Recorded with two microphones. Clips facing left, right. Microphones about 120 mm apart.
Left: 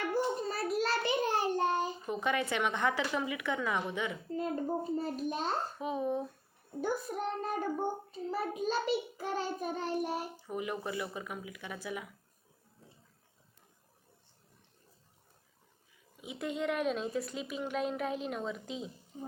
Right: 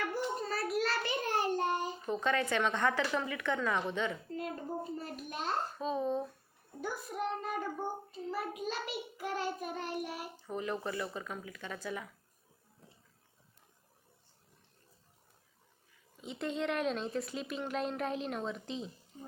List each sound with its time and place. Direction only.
0.1 s a sound: 25° left (ahead or behind)
0.8 s a child's voice: 20° left (ahead or behind)
4.4 s a child's voice: 25° left (ahead or behind)
5.8 s speech: 15° left (ahead or behind)
6.8 s child singing: 35° left (ahead or behind)
10.3 s speech: 10° left (ahead or behind)
16.2 s speech: 5° left (ahead or behind)